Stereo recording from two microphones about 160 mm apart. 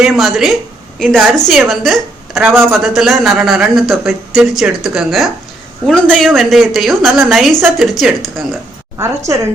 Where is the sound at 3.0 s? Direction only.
Centre (ahead or behind).